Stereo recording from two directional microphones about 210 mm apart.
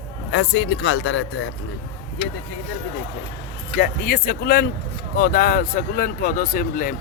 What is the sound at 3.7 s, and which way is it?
A man's voice, 50° left (ahead or behind).